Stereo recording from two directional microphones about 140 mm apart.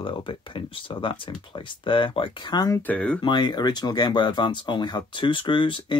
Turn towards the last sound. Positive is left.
turn(degrees=35)  # may be behind; listen again after turning